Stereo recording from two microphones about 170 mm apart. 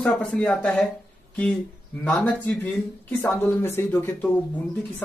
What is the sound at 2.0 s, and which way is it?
Speech, 10° left (ahead or behind).